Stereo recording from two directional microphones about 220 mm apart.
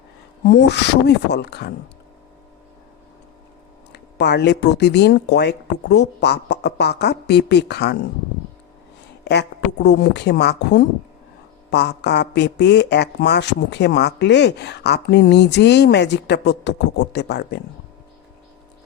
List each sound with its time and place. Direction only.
0.4 s speech: 50° left (ahead or behind)
3.9 s speech: 50° left (ahead or behind)
9.2 s speech: 50° left (ahead or behind)